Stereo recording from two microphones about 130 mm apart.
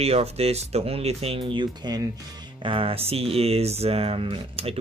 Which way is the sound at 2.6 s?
45° right (ahead or behind).